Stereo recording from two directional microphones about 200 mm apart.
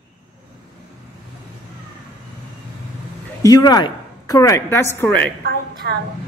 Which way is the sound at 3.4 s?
20° left (ahead or behind).